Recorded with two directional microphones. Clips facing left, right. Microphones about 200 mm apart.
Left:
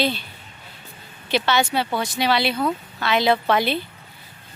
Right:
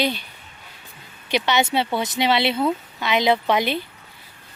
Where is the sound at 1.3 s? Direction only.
15° right (ahead or behind).